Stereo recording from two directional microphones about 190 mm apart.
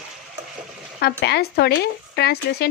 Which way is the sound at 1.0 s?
60° left (ahead or behind).